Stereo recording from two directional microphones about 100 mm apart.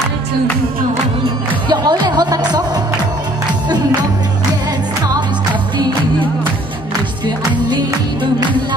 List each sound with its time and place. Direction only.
1.7 s music: 45° right (ahead or behind)